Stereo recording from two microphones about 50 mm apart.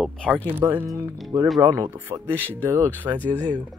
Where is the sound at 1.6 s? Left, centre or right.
Right.